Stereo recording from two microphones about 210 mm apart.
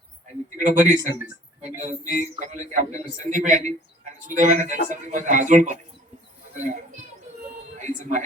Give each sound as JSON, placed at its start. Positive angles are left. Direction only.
{"t": 0.5, "sound": "a man's voice", "side_deg": -35}